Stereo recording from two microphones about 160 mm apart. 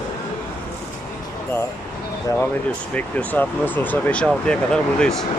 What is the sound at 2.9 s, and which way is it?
Speech, 10° left (ahead or behind).